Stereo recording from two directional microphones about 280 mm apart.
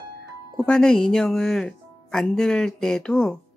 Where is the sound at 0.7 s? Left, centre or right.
Centre.